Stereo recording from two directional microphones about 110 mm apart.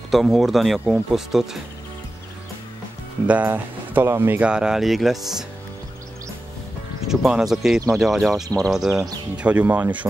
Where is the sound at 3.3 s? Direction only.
15° right (ahead or behind).